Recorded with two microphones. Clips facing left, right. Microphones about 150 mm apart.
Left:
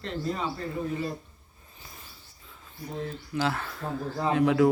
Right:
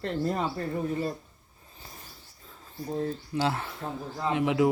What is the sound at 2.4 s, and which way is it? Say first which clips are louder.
A man's voice: right 4 dB; 35° right (ahead or behind).